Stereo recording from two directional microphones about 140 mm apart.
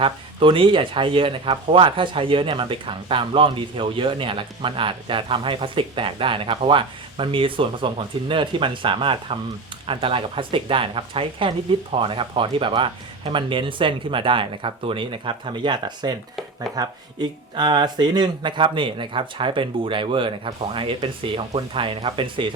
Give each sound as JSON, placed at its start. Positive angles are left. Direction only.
{"t": 0.0, "sound": "speech", "side_deg": -40}